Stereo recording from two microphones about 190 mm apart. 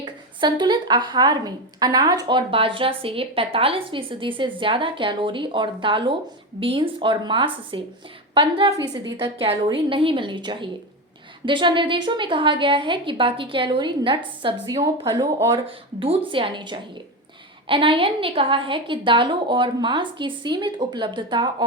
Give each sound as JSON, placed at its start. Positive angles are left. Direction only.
{"t": 0.0, "sound": "a woman's voice", "side_deg": -25}